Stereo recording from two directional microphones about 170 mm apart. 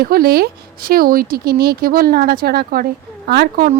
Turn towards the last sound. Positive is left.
turn(degrees=-65)  # may be behind; listen again after turning